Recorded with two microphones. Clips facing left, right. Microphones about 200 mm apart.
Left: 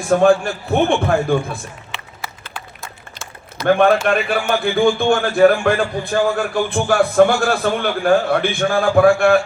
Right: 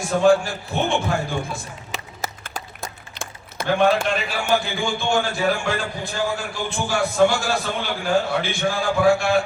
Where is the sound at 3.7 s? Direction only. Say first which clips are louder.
Left 5 dB; 55° left (ahead or behind).